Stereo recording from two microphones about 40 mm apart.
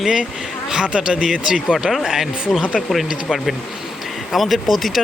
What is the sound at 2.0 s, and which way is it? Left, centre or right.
Speech, centre.